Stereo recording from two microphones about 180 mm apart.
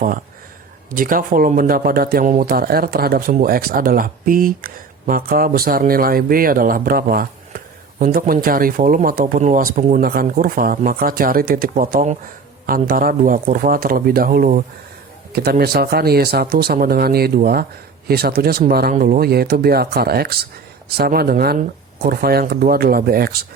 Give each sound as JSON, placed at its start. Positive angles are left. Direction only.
{"t": 0.9, "sound": "speech", "side_deg": -50}